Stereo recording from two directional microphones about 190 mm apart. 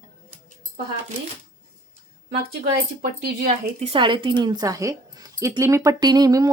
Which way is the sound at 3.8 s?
30° right (ahead or behind).